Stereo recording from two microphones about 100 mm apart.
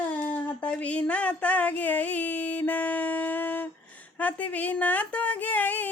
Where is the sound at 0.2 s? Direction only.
15° left (ahead or behind).